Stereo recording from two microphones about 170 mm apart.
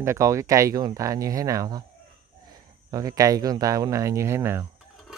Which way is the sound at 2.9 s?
20° right (ahead or behind).